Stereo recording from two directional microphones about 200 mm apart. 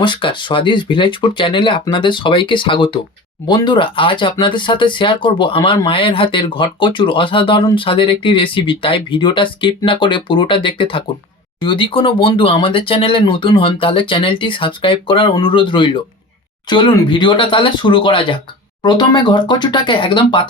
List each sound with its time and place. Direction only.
0.0 s speech: 25° left (ahead or behind)